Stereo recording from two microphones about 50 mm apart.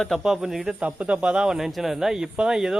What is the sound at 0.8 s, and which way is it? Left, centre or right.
Speech, right.